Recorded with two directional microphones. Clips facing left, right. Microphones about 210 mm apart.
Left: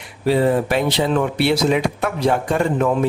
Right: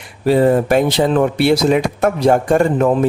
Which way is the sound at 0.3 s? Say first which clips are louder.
Right 4 dB; 45° right (ahead or behind).